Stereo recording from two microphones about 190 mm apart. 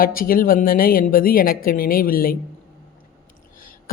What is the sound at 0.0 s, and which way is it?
Speech, 50° left (ahead or behind).